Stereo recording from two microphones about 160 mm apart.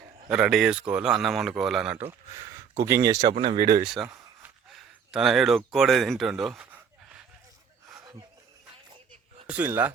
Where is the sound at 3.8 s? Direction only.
5° right (ahead or behind).